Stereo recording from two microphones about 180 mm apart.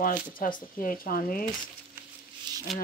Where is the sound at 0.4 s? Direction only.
50° left (ahead or behind).